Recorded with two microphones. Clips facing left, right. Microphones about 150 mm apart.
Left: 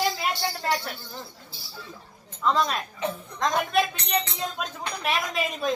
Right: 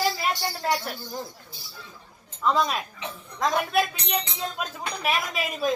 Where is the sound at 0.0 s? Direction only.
10° right (ahead or behind).